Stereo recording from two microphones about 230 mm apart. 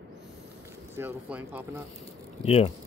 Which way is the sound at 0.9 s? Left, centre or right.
Centre.